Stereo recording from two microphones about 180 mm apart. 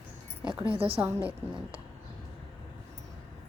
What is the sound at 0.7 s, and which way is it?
Speech, 35° right (ahead or behind).